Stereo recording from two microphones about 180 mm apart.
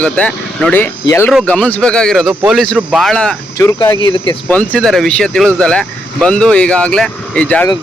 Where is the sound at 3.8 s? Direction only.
25° left (ahead or behind).